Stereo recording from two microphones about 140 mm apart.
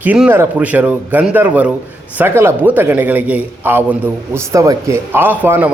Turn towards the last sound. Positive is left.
turn(degrees=-15)  # may be behind; listen again after turning